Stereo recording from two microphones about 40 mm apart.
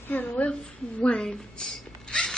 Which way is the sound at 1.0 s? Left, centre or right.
Centre.